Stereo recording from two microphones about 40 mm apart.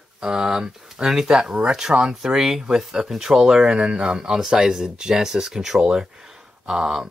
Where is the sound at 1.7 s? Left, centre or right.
Centre.